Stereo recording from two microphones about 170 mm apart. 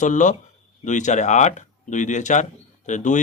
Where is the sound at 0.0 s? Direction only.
45° left (ahead or behind).